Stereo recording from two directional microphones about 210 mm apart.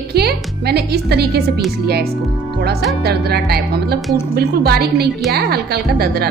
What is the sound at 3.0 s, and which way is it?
A woman's voice, 50° right (ahead or behind).